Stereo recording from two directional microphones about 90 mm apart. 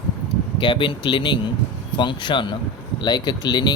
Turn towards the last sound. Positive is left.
turn(degrees=55)  # may be behind; listen again after turning